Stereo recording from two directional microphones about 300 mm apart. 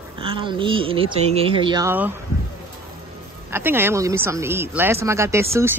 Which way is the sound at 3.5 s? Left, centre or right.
Centre.